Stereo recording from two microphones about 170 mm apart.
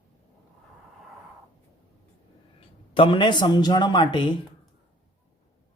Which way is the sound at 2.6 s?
30° left (ahead or behind).